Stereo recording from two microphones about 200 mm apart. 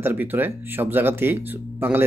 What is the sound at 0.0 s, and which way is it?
Speech, 10° right (ahead or behind).